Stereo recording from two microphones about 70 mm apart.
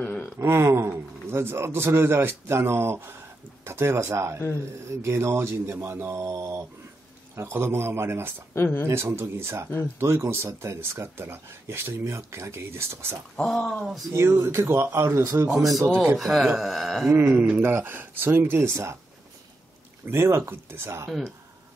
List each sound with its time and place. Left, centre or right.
0.4 s a man's voice: right
7.3 s a man's voice: right
8.5 s speech: left
8.8 s a man's voice: right
13.4 s speech: centre
14.1 s a man's voice: right
16.2 s speech: centre
17.1 s a man's voice: right
20.1 s a man's voice: right